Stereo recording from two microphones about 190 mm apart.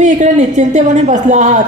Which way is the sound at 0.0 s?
40° right (ahead or behind).